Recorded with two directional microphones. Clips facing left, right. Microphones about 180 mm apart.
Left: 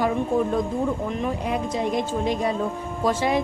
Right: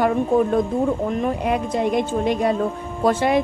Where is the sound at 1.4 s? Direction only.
60° right (ahead or behind).